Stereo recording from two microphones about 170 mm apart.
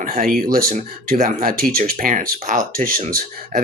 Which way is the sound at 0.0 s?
60° right (ahead or behind).